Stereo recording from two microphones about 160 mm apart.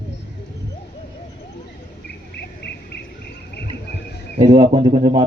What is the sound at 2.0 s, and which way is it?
Cricket, 90° left.